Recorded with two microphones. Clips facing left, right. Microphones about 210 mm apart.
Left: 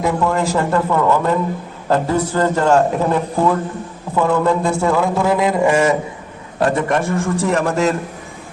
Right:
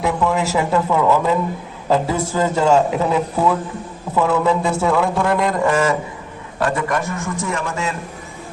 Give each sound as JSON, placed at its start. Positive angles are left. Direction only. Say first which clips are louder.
{"t": 0.0, "sound": "a man's voice", "louder": "left 1 dB", "side_deg": 0}
{"t": 6.7, "sound": "a man's voice", "louder": "left 4 dB", "side_deg": 25}
{"t": 7.3, "sound": "a man's voice", "louder": "left 8 dB", "side_deg": 35}